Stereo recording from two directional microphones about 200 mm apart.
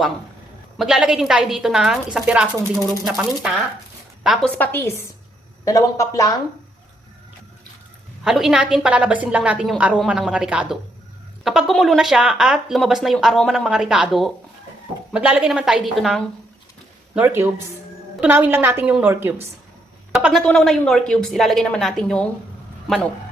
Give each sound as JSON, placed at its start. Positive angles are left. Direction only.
{"t": 0.8, "sound": "speech", "side_deg": -5}
{"t": 4.2, "sound": "a woman's voice", "side_deg": 0}
{"t": 8.2, "sound": "speech", "side_deg": 0}
{"t": 17.2, "sound": "a woman's voice", "side_deg": -10}